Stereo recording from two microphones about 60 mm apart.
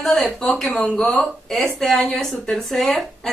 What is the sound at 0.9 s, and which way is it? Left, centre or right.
Speech, left.